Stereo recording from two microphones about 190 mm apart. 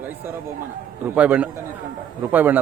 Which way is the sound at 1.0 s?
10° right (ahead or behind).